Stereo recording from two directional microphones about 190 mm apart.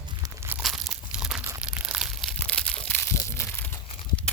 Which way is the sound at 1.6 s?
5° right (ahead or behind).